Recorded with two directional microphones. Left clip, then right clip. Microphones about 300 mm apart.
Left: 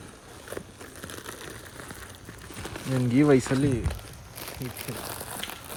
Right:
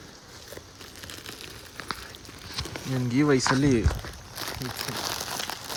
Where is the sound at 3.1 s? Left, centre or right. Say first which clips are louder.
Left 2 dB; centre.